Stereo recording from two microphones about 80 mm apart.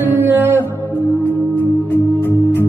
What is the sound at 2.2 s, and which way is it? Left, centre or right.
Music, left.